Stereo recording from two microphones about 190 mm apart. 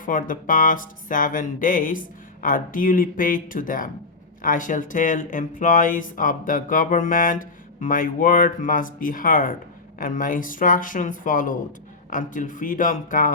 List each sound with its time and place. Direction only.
0.0 s speech: 45° left (ahead or behind)